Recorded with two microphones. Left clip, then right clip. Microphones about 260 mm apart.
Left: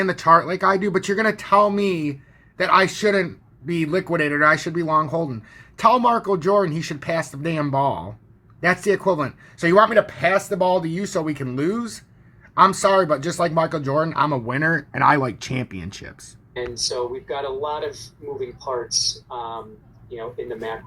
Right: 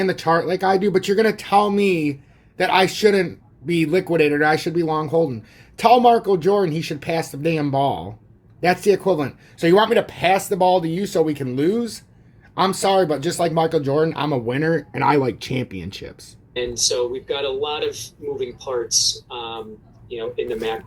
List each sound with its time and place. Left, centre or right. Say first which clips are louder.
0.0 s a man's voice: left 3 dB; centre
17.9 s a man's voice: right 4 dB; centre
19.3 s speech: even; right
20.1 s speech: right 5 dB; right